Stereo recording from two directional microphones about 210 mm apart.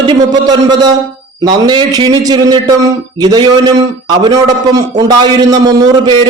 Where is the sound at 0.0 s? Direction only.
20° right (ahead or behind).